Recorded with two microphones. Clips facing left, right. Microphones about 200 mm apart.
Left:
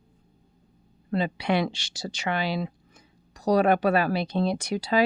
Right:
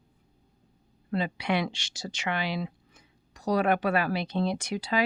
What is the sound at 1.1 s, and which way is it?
A woman's voice, 35° left (ahead or behind).